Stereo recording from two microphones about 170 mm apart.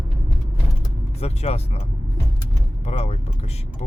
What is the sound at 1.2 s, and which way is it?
Speech, 40° left (ahead or behind).